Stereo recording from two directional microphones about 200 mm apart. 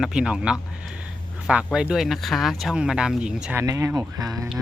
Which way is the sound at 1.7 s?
5° right (ahead or behind).